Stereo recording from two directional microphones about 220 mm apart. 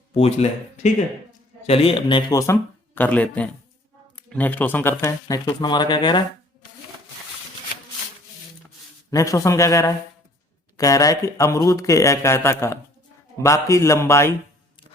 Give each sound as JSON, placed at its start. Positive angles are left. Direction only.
{"t": 0.1, "sound": "speech", "side_deg": 30}
{"t": 9.0, "sound": "speech", "side_deg": 15}